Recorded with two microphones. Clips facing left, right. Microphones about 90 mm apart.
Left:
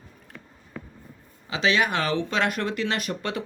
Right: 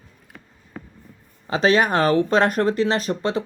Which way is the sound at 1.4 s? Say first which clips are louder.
Right 5 dB; 40° right (ahead or behind).